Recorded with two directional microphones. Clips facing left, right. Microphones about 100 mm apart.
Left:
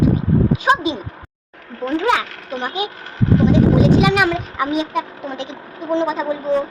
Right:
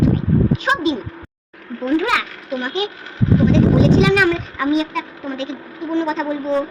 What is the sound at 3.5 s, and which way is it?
Speech, 10° left (ahead or behind).